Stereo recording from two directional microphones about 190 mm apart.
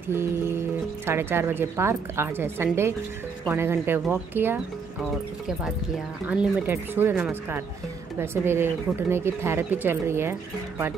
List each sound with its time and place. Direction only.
0.1 s speech: 10° right (ahead or behind)
6.2 s speech: 5° right (ahead or behind)